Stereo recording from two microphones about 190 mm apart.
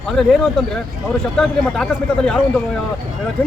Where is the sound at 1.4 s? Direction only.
5° left (ahead or behind).